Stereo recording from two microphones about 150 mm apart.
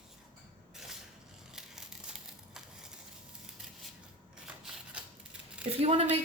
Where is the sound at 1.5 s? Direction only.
5° right (ahead or behind).